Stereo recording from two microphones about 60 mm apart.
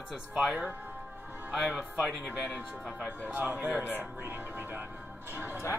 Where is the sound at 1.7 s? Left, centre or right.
Centre.